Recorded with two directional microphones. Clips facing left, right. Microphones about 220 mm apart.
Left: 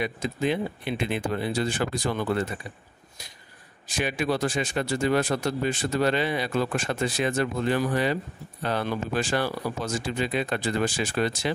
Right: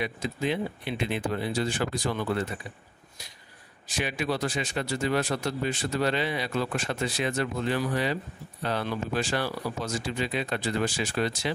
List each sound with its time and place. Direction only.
0.0 s speech: 50° left (ahead or behind)
3.8 s speech: 50° left (ahead or behind)